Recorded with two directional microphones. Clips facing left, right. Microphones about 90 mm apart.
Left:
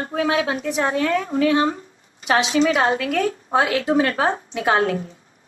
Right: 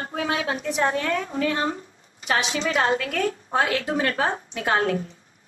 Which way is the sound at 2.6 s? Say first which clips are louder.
Left 4 dB; 25° left (ahead or behind).